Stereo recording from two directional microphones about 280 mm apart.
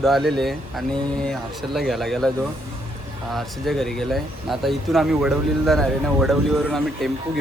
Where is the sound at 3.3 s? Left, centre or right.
Centre.